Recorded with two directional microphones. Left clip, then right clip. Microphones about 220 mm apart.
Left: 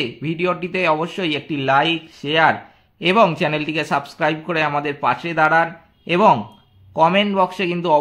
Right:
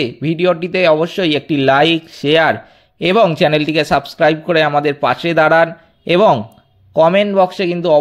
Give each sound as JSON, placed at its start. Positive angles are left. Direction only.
{"t": 0.0, "sound": "a man's voice", "side_deg": -25}